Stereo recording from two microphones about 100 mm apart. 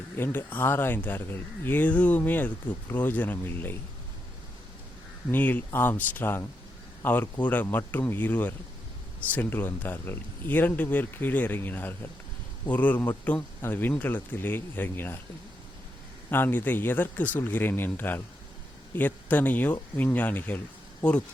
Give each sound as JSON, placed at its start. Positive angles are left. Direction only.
{"t": 0.2, "sound": "speech", "side_deg": 20}
{"t": 5.3, "sound": "speech", "side_deg": 15}
{"t": 16.3, "sound": "speech", "side_deg": 20}